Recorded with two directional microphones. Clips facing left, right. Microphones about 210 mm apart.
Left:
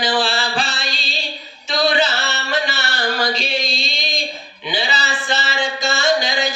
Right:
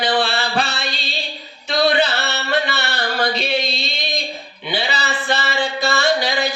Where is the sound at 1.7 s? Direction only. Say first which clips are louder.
Right 1 dB; 55° right (ahead or behind).